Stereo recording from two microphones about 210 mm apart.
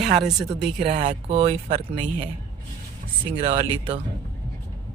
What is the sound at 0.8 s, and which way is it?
Speech, 25° right (ahead or behind).